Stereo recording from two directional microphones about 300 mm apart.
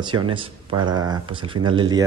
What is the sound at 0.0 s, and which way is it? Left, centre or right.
A man's voice, centre.